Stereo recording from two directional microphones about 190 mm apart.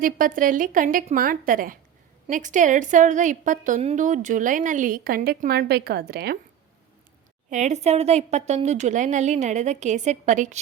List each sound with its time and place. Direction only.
0.0 s a woman's voice: 45° right (ahead or behind)
7.5 s a woman's voice: 35° right (ahead or behind)